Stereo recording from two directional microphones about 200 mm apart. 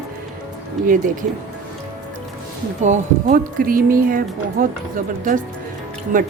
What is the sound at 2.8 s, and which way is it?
A woman's voice, 35° right (ahead or behind).